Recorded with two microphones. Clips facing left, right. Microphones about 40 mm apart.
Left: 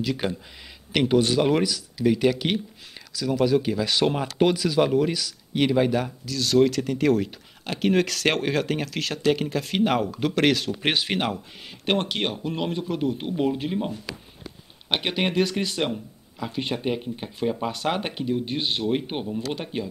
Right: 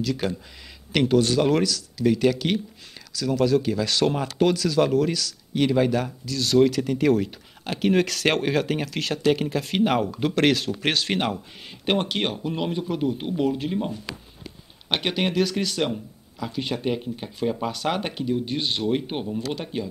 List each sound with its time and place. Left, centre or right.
0.0 s speech: centre
10.8 s speech: left
11.1 s speech: centre
13.4 s speech: centre